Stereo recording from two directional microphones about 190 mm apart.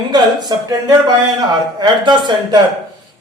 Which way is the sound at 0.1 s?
20° right (ahead or behind).